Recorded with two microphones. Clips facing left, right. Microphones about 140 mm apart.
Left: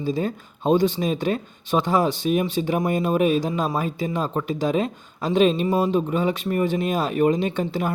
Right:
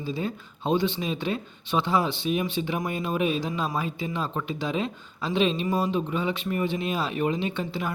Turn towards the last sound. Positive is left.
turn(degrees=45)  # may be behind; listen again after turning